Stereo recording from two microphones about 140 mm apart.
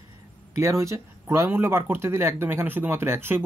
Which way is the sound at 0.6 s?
20° right (ahead or behind).